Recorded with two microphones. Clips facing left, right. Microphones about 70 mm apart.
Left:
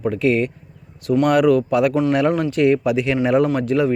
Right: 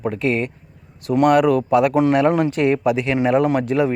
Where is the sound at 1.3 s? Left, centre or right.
Centre.